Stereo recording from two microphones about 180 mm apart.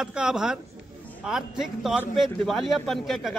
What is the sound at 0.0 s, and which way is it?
Speech, 5° right (ahead or behind).